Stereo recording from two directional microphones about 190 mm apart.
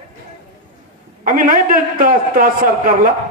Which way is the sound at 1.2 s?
45° right (ahead or behind).